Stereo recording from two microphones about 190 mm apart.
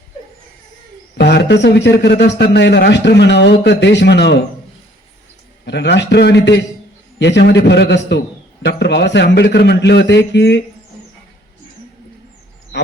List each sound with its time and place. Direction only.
1.2 s a man's voice: 60° left (ahead or behind)
5.6 s a man's voice: 65° left (ahead or behind)